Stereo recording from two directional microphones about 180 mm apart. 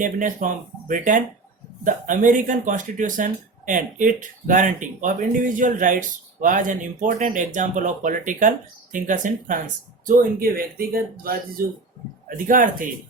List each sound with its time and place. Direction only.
0.0 s speech: 45° right (ahead or behind)